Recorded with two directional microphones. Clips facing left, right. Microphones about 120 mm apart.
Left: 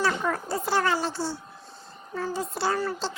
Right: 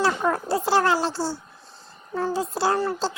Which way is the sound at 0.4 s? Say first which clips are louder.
Right 5 dB; 90° right.